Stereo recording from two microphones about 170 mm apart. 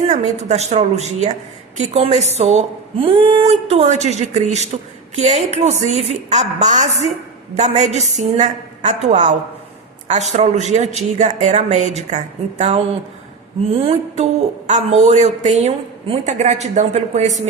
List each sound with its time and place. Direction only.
0.1 s a woman's voice: 40° right (ahead or behind)
10.3 s speech: 40° right (ahead or behind)
13.8 s a woman's voice: 35° right (ahead or behind)